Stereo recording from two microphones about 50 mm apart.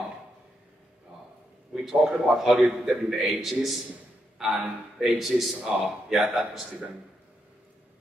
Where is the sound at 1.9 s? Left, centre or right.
Centre.